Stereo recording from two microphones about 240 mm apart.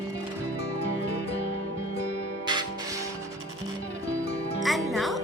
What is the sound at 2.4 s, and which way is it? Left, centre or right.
Music, centre.